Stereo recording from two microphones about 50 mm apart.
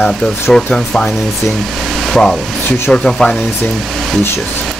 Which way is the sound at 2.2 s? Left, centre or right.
Centre.